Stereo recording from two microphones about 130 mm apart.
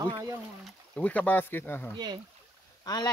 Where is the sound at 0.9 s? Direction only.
10° left (ahead or behind).